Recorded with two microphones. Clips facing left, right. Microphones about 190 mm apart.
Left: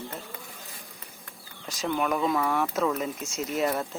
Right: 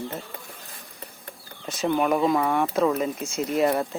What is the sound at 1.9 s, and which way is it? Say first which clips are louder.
Speech: right 5 dB; 25° right (ahead or behind).